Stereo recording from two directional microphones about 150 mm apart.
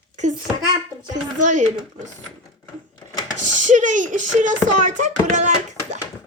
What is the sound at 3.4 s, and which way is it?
Speech, 55° right (ahead or behind).